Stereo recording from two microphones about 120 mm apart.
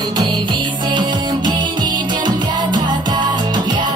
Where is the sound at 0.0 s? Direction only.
35° right (ahead or behind).